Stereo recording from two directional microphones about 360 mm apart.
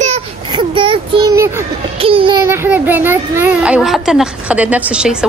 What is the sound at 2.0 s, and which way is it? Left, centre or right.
A child's voice, centre.